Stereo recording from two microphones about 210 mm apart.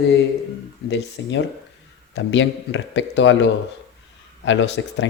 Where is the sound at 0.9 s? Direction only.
60° left (ahead or behind).